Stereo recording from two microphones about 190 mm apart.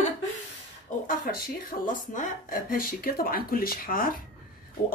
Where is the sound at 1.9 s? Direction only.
45° left (ahead or behind).